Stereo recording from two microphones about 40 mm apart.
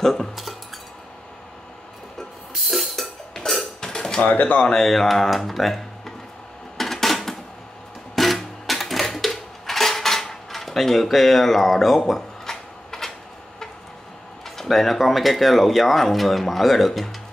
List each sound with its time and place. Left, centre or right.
0.0 s speech: centre
2.7 s music: centre
3.3 s a sound: centre
3.8 s dishes: centre
4.3 s speech: left
4.7 s speech: centre
6.8 s dishes: centre
8.2 s a sound: centre
14.6 s speech: centre